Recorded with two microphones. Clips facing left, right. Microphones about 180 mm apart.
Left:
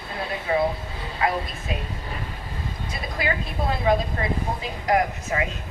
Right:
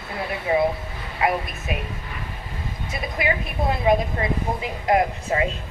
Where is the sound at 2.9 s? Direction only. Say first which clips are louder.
Right 3 dB; 20° right (ahead or behind).